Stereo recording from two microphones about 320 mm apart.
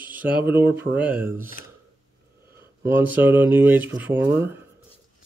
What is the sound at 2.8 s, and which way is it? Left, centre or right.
Speech, centre.